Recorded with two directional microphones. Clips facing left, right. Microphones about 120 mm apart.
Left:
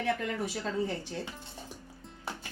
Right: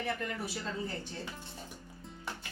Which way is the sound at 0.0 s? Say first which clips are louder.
Left 5 dB; 90° left.